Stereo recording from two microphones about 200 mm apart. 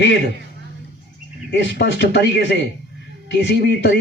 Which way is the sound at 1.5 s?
60° left (ahead or behind).